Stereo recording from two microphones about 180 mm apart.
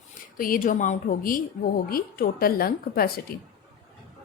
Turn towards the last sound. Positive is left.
turn(degrees=55)  # may be behind; listen again after turning